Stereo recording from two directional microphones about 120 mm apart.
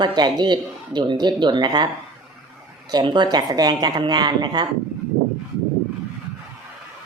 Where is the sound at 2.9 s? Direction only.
35° right (ahead or behind).